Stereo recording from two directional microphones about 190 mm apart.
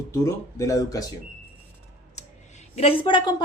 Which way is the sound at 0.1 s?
15° left (ahead or behind).